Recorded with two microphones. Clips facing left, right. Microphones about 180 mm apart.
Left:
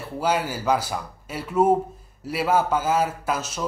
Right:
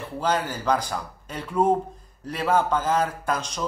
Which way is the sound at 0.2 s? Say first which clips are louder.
Left 1 dB; 10° left (ahead or behind).